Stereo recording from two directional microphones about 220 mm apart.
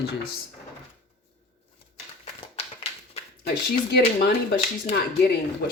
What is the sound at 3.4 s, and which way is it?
Speech, 45° left (ahead or behind).